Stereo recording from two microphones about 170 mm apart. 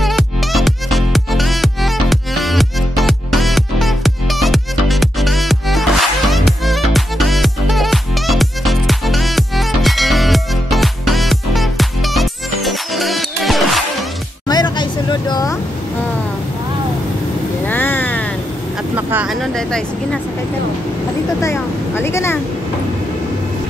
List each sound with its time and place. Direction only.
0.0 s music: centre (ahead or behind)
14.5 s a sound: 25° left (ahead or behind)
17.6 s vehicle: 10° left (ahead or behind)
18.9 s a sound: 10° right (ahead or behind)
19.4 s vehicle: 5° left (ahead or behind)
21.4 s vehicle: 15° left (ahead or behind)